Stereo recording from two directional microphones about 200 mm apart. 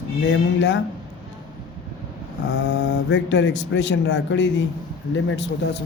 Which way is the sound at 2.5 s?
60° left (ahead or behind).